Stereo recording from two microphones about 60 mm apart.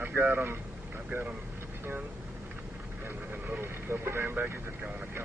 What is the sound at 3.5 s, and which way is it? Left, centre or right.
Speech, right.